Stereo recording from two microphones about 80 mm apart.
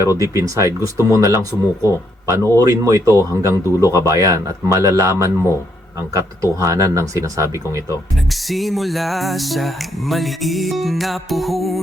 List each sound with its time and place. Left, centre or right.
0.2 s speech: right
8.3 s music: centre